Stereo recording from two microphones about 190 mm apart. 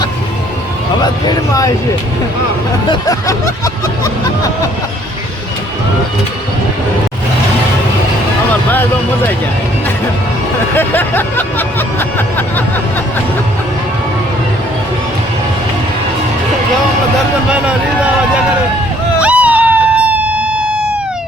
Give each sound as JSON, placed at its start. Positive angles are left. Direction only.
{"t": 1.0, "sound": "speech", "side_deg": 20}
{"t": 2.9, "sound": "music", "side_deg": 20}
{"t": 10.8, "sound": "music", "side_deg": 10}
{"t": 19.2, "sound": "a sound", "side_deg": -5}